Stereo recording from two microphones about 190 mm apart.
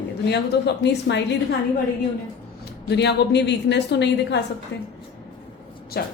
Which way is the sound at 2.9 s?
60° left (ahead or behind).